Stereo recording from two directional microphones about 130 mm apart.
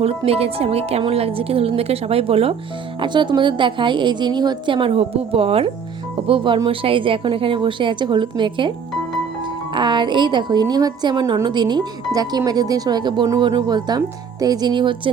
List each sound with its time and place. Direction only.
0.3 s a woman's voice: 50° right (ahead or behind)
3.0 s a woman's voice: 35° right (ahead or behind)
9.7 s a woman's voice: 35° right (ahead or behind)